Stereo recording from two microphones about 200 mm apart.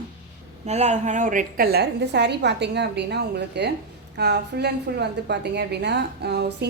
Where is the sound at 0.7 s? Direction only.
35° right (ahead or behind); by 6.7 s 55° right (ahead or behind).